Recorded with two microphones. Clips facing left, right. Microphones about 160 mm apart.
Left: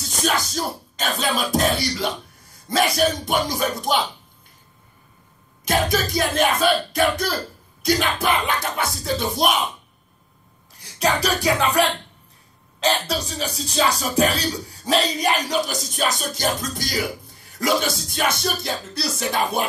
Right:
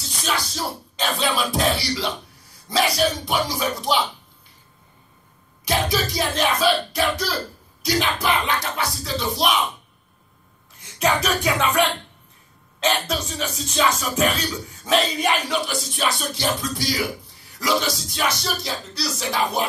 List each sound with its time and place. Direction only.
0.0 s music: 45° left (ahead or behind)
5.7 s music: 50° left (ahead or behind)
10.8 s speech: 35° left (ahead or behind)
12.8 s music: 35° left (ahead or behind); by 19.6 s 50° left (ahead or behind)